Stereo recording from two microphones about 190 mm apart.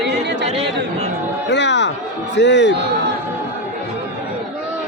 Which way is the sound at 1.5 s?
65° left (ahead or behind).